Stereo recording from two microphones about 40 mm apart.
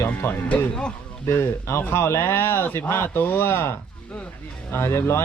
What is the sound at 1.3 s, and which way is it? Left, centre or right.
Speech, left.